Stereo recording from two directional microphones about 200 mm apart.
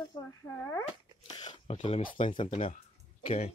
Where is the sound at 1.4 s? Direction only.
20° left (ahead or behind).